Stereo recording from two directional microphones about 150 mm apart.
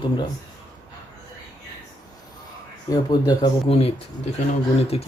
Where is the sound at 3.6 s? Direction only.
40° left (ahead or behind).